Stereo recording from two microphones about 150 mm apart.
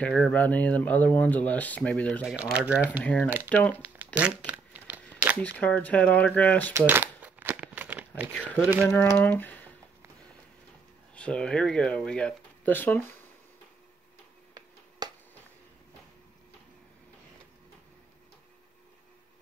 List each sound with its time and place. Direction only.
0.0 s speech: 10° left (ahead or behind)
2.2 s speech: 5° right (ahead or behind)
3.0 s speech: 10° left (ahead or behind)
4.0 s crumpling: 10° right (ahead or behind)
5.4 s speech: 10° left (ahead or behind)
6.9 s crumpling: 10° right (ahead or behind)
8.3 s speech: 10° left (ahead or behind)
8.5 s speech: 10° right (ahead or behind)
9.2 s speech: 10° left (ahead or behind)
11.1 s speech: 5° left (ahead or behind)
15.0 s finger snapping: 25° right (ahead or behind)